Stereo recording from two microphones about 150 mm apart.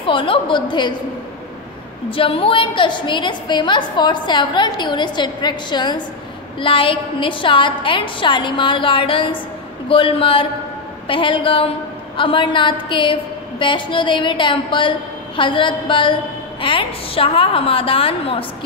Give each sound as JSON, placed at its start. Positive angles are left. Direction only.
{"t": 0.0, "sound": "a woman's voice", "side_deg": 35}
{"t": 2.0, "sound": "a woman's voice", "side_deg": 35}